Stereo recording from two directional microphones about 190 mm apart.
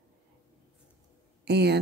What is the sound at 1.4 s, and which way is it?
Speech, 60° right (ahead or behind).